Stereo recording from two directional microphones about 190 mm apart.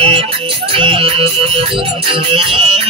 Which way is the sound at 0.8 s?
30° right (ahead or behind).